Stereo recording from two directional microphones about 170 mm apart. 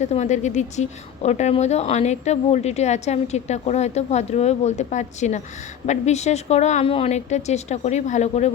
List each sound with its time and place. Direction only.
0.0 s a woman's voice: 40° left (ahead or behind)